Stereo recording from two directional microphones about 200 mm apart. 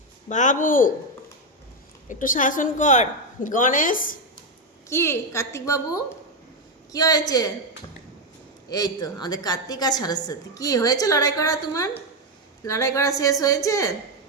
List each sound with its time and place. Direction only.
0.3 s a woman's voice: 40° left (ahead or behind)
2.0 s a woman's voice: 40° left (ahead or behind)
4.9 s a woman's voice: 15° left (ahead or behind)
8.7 s a woman's voice: 20° left (ahead or behind)